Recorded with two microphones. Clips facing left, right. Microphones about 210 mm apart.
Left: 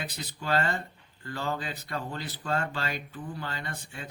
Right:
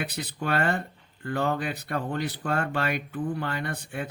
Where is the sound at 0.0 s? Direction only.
60° right (ahead or behind).